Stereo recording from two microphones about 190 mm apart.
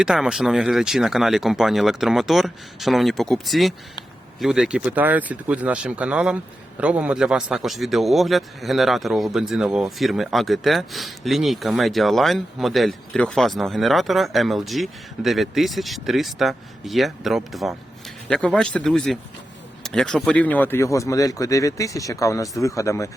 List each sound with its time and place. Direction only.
0.0 s speech: 5° right (ahead or behind); by 23.0 s 15° left (ahead or behind)